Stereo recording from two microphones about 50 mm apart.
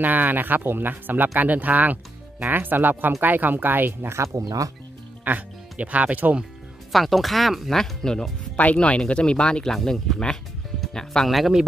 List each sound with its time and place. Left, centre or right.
0.0 s speech: right
4.1 s speech: right
5.2 s speech: right
6.9 s speech: centre
8.5 s speech: left
9.8 s speech: centre
10.1 s speech: centre
11.2 s speech: centre